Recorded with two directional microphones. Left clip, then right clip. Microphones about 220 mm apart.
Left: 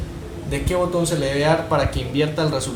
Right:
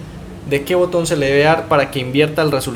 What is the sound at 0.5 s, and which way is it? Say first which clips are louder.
Speech: right 6 dB; 45° right (ahead or behind).